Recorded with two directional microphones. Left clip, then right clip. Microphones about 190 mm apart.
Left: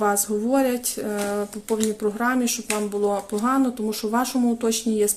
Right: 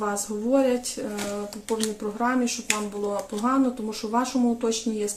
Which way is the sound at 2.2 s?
45° left (ahead or behind).